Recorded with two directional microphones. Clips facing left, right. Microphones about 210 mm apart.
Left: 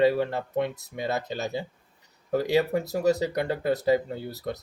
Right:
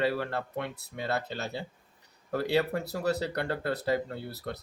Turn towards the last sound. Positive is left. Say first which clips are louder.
# left 6 dB
turn(degrees=15)  # may be behind; listen again after turning